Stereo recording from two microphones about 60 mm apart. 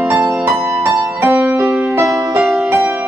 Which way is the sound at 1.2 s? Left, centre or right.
Right.